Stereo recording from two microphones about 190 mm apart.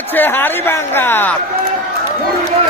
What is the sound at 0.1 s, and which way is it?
Speech, 10° left (ahead or behind).